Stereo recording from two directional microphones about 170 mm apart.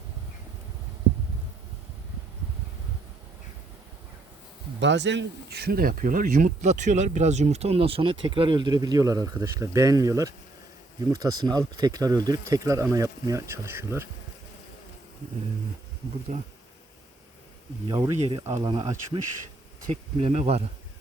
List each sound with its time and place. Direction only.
4.8 s speech: 90° right; by 14.1 s 15° right (ahead or behind)
17.8 s speech: 20° right (ahead or behind)
19.9 s speech: 40° right (ahead or behind)